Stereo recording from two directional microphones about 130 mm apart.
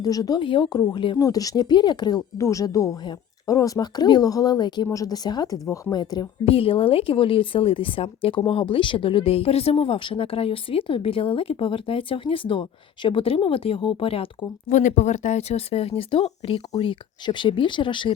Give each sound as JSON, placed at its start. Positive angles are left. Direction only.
{"t": 0.0, "sound": "speech", "side_deg": 30}
{"t": 6.4, "sound": "speech", "side_deg": 45}
{"t": 14.7, "sound": "speech", "side_deg": 70}